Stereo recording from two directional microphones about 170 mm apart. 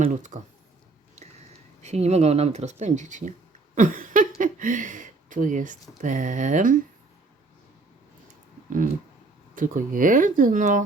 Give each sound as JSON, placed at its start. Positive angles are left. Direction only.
{"t": 0.0, "sound": "speech", "side_deg": -50}
{"t": 1.8, "sound": "speech", "side_deg": -40}
{"t": 3.8, "sound": "a sound", "side_deg": -50}
{"t": 4.4, "sound": "speech", "side_deg": -50}
{"t": 9.6, "sound": "speech", "side_deg": -50}